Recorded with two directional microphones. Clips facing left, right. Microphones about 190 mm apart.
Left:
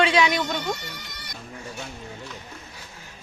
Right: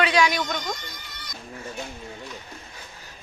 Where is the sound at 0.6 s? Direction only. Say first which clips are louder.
Left 3 dB; 70° left (ahead or behind).